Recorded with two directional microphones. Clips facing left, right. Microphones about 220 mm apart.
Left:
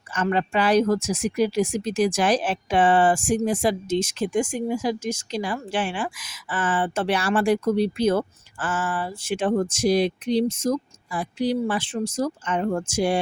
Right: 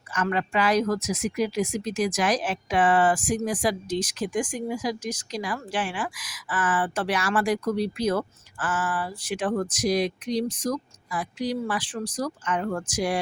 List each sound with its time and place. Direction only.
0.1 s speech: 30° left (ahead or behind)